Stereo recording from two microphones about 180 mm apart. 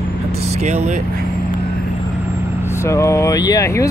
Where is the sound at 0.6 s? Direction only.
40° right (ahead or behind).